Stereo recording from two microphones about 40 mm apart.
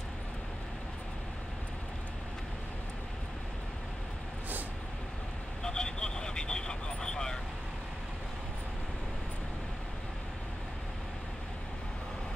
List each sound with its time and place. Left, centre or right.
5.6 s vehicle: centre